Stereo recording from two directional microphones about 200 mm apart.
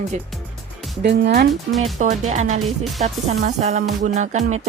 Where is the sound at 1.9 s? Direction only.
35° right (ahead or behind).